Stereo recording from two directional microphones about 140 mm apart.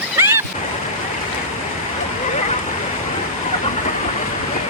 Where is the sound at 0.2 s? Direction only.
15° right (ahead or behind).